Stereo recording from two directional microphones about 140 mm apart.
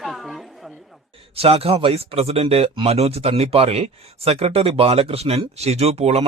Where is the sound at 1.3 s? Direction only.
45° right (ahead or behind).